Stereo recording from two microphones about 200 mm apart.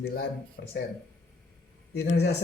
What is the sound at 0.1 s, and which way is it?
Speech, 50° left (ahead or behind).